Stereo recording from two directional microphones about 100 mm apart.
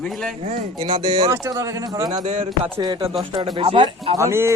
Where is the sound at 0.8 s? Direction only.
70° right (ahead or behind).